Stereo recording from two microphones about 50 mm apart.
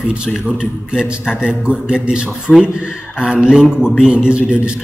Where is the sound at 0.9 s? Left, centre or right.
Centre.